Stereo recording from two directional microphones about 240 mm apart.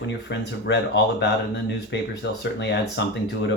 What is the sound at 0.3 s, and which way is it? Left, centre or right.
Speech, left.